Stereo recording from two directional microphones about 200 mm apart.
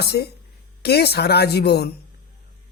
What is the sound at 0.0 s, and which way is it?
A man's voice, 55° left (ahead or behind).